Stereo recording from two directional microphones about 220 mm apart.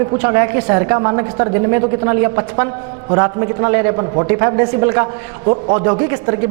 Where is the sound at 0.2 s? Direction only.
15° right (ahead or behind).